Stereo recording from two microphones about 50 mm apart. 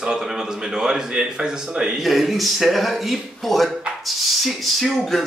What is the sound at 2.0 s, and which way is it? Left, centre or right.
Speech, centre.